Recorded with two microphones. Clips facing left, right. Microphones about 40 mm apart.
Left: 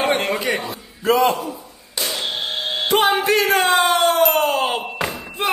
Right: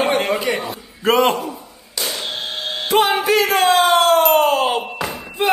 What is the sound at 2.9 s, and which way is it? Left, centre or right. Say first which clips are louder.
Speech: right 2 dB; right.